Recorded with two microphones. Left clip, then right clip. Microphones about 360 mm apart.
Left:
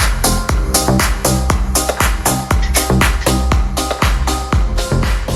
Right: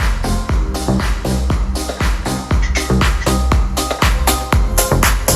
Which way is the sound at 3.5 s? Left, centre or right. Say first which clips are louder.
Even; centre.